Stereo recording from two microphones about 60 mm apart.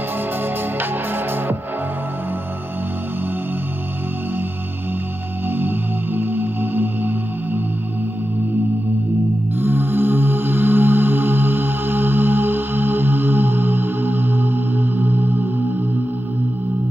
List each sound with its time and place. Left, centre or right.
0.7 s music: right
5.5 s music: right
9.6 s music: right